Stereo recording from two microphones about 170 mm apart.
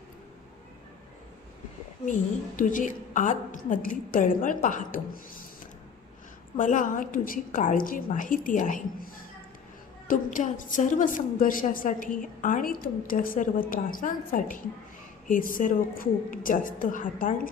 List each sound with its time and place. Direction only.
2.6 s a woman's voice: 50° left (ahead or behind)
6.6 s a woman's voice: 50° left (ahead or behind)
10.1 s a woman's voice: 50° left (ahead or behind)